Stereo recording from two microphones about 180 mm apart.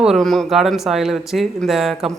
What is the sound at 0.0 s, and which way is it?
Speech, centre (ahead or behind).